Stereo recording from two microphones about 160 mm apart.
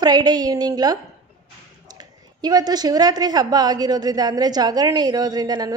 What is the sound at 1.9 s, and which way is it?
A woman's voice, 25° right (ahead or behind).